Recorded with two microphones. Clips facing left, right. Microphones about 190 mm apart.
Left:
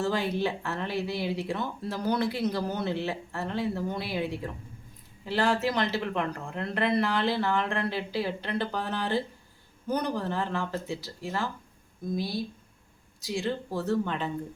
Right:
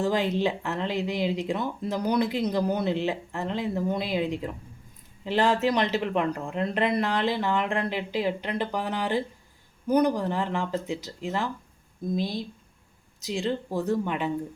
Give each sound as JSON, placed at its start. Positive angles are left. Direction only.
{"t": 0.0, "sound": "a woman's voice", "side_deg": -15}